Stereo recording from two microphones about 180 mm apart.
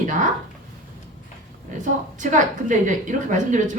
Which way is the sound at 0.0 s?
45° right (ahead or behind).